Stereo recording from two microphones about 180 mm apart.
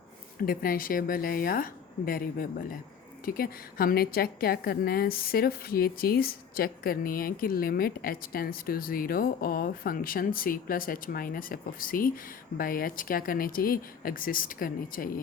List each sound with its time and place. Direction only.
0.4 s a woman's voice: 55° left (ahead or behind)